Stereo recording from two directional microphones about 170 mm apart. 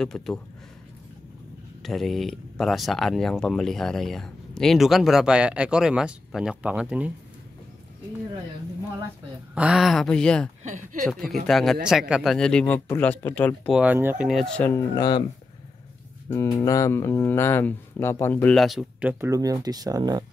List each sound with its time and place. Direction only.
0.0 s speech: 5° left (ahead or behind)
1.8 s speech: centre (ahead or behind)
9.6 s speech: 5° right (ahead or behind)
10.6 s speech: 45° right (ahead or behind)
11.4 s speech: centre (ahead or behind)
13.7 s speech: 10° right (ahead or behind)
15.0 s speech: 25° left (ahead or behind)
16.4 s speech: 20° left (ahead or behind); by 20.2 s 20° right (ahead or behind)